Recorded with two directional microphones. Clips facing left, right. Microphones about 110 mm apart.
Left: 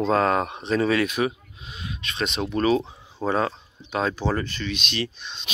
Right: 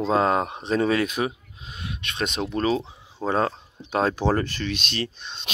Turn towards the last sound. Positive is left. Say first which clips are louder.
# left 1 dB
turn(degrees=-40)  # may be behind; listen again after turning